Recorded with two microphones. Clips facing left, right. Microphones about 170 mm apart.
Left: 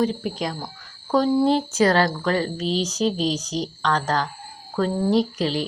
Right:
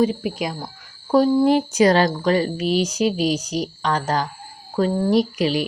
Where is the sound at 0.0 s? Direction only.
10° right (ahead or behind).